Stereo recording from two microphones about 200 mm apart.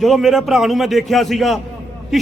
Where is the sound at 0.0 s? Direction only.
Centre (ahead or behind).